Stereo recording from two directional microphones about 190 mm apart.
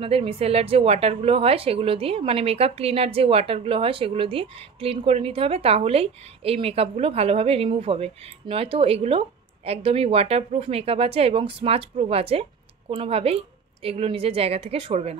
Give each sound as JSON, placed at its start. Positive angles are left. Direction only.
{"t": 0.0, "sound": "a woman's voice", "side_deg": -30}